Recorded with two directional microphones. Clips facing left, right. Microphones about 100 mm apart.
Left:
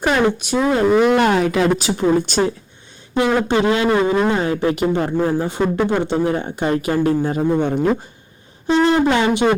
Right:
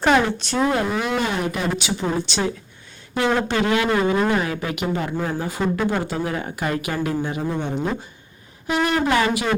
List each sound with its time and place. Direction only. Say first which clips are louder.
0.0 s speech: left 1 dB; 10° left (ahead or behind)
0.9 s speech: left 9 dB; 65° left (ahead or behind); by 1.7 s 90° left
1.8 s speech: left 7 dB; 45° left (ahead or behind)
3.2 s a man's voice: left 3 dB; 20° left (ahead or behind); by 7.6 s 40° left (ahead or behind)
7.6 s speech: left 7 dB; 55° left (ahead or behind)
8.6 s a sound: left 6 dB; 30° left (ahead or behind)
9.0 s a man's voice: left 4 dB; 25° left (ahead or behind)